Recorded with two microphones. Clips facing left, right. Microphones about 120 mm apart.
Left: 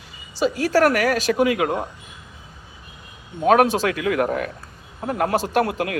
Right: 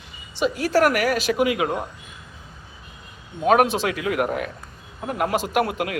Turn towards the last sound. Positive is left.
turn(degrees=40)  # may be behind; listen again after turning